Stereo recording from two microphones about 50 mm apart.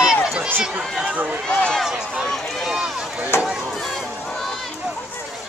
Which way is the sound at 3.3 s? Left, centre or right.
Left.